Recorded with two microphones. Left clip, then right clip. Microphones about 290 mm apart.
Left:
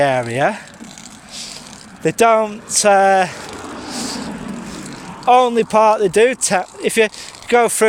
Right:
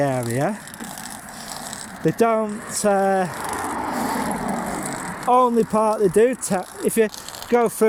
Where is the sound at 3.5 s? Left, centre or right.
Centre.